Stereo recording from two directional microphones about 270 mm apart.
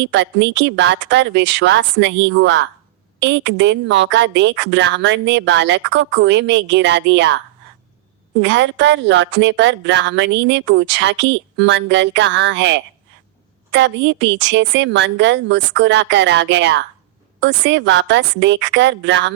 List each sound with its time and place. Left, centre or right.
0.0 s a woman's voice: right